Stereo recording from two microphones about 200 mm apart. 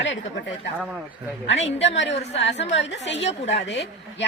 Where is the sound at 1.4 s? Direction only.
30° left (ahead or behind).